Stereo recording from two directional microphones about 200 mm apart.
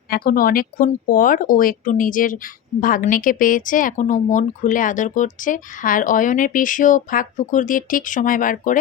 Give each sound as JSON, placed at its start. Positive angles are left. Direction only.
{"t": 0.1, "sound": "a woman's voice", "side_deg": 45}